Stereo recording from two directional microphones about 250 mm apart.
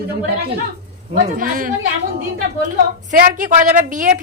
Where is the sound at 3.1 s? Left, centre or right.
Right.